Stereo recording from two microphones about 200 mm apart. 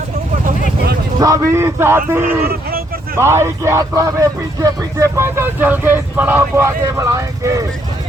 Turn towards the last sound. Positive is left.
turn(degrees=-15)  # may be behind; listen again after turning